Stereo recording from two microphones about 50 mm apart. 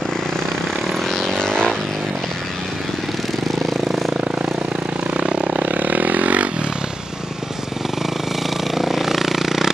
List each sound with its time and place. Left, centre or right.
1.0 s vehicle: centre
5.1 s vehicle: centre
5.6 s vehicle: right
8.7 s vehicle: centre